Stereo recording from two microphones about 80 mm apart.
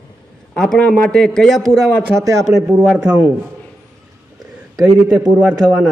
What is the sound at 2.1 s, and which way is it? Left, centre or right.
Speech, right.